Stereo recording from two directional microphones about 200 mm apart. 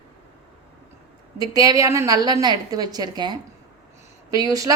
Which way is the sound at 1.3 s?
15° right (ahead or behind).